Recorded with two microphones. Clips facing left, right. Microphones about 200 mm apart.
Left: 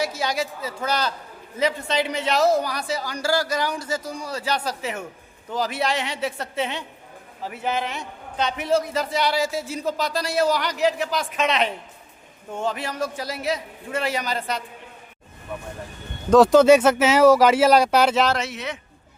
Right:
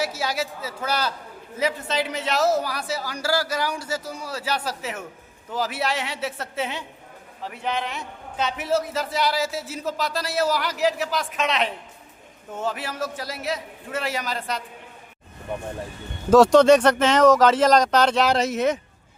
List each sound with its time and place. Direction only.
0.0 s a man's voice: 5° right (ahead or behind)
16.3 s speech: centre (ahead or behind)
18.3 s a man's voice: 45° right (ahead or behind)